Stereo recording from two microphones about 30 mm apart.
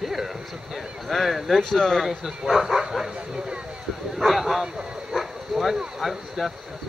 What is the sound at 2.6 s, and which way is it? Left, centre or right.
Speech, centre.